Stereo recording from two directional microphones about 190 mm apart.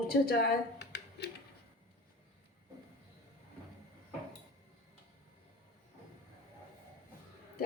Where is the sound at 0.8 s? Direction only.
60° left (ahead or behind).